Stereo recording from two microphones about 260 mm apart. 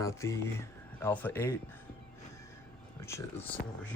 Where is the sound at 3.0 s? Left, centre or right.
Centre.